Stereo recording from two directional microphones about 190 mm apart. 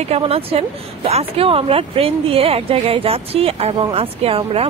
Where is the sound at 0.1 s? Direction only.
30° right (ahead or behind).